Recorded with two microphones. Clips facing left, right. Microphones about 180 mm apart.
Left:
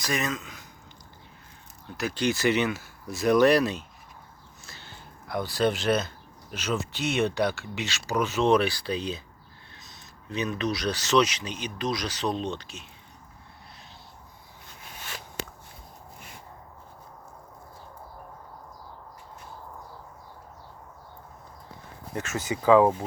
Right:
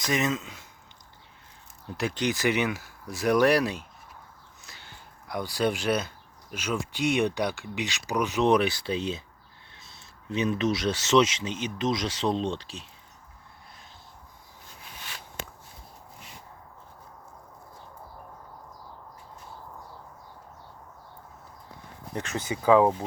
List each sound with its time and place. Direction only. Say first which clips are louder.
0.0 s speech: right 3 dB; 20° right (ahead or behind)
2.0 s speech: left 1 dB; 20° right (ahead or behind)
22.1 s speech: left 1 dB; 20° right (ahead or behind)